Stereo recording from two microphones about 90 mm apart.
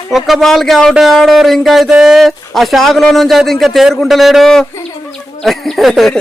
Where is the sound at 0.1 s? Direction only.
Centre (ahead or behind).